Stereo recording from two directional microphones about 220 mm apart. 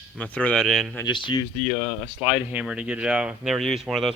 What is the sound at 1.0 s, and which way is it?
Speech, 20° left (ahead or behind).